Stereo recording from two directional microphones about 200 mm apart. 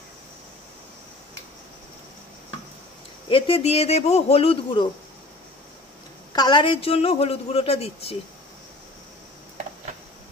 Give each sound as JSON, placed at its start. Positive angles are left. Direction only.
{"t": 3.3, "sound": "a man's voice", "side_deg": 25}
{"t": 6.3, "sound": "a man's voice", "side_deg": 20}